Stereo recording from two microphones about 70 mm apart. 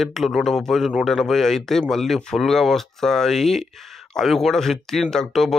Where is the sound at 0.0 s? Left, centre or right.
Centre.